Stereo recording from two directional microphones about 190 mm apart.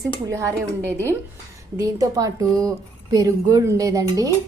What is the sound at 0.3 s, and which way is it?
A woman's voice, 15° right (ahead or behind).